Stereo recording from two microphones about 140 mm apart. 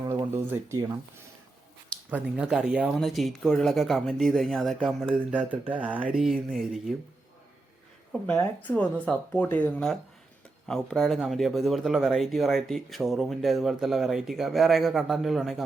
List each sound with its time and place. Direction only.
0.3 s speech: 15° right (ahead or behind)
2.0 s speech: 10° right (ahead or behind)
8.3 s speech: 10° left (ahead or behind)